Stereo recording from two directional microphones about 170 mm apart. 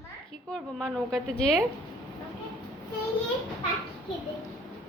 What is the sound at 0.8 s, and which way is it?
Speech, 5° left (ahead or behind).